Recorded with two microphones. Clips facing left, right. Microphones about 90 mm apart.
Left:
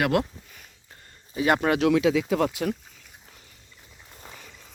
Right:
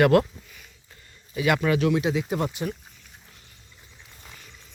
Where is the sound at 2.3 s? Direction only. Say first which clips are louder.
Left 3 dB; 90° left.